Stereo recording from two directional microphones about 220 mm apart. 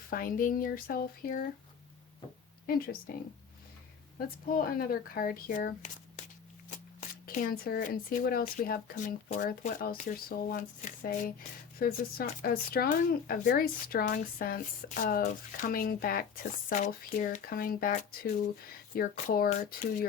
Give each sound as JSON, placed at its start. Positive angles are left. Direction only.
{"t": 0.1, "sound": "speech", "side_deg": 40}
{"t": 2.6, "sound": "speech", "side_deg": 40}
{"t": 4.4, "sound": "speech", "side_deg": 40}
{"t": 7.3, "sound": "speech", "side_deg": 40}